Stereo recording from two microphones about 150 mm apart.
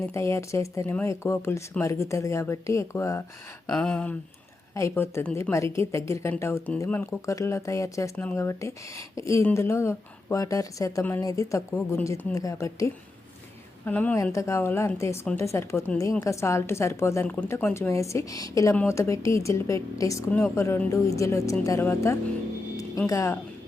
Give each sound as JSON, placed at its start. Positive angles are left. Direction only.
{"t": 0.0, "sound": "speech", "side_deg": 20}
{"t": 3.7, "sound": "speech", "side_deg": 5}
{"t": 4.7, "sound": "speech", "side_deg": 20}
{"t": 8.1, "sound": "speech", "side_deg": 10}